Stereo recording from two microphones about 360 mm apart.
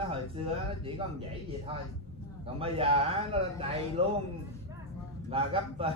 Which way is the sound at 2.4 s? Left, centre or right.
Centre.